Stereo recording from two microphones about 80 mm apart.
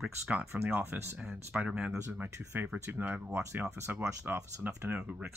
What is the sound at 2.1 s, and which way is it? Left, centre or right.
Speech, right.